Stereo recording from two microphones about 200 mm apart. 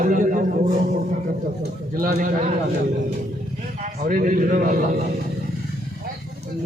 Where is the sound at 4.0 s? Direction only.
40° right (ahead or behind).